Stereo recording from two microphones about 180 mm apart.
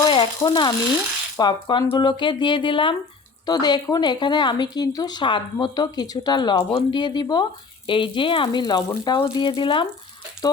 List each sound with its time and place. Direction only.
0.0 s speech: 25° left (ahead or behind)